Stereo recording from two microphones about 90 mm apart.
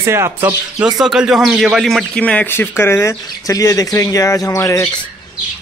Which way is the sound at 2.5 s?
25° left (ahead or behind).